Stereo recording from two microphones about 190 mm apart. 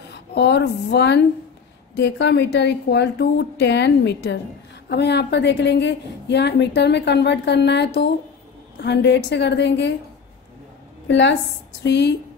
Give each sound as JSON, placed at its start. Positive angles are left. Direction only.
{"t": 0.1, "sound": "a woman's voice", "side_deg": 60}
{"t": 11.1, "sound": "a woman's voice", "side_deg": 70}